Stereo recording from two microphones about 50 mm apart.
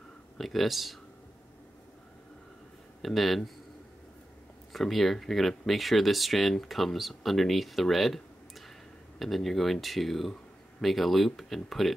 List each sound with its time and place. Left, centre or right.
0.4 s speech: centre
3.0 s speech: centre
4.7 s speech: centre